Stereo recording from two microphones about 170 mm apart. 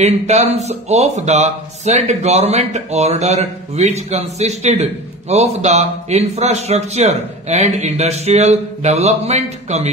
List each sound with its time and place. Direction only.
0.0 s speech: 40° right (ahead or behind)